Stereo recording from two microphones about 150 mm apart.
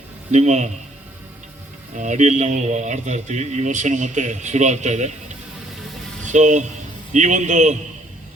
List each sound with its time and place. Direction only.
0.3 s a man's voice: 50° right (ahead or behind)
2.0 s a man's voice: 55° right (ahead or behind)
6.2 s a man's voice: 55° right (ahead or behind)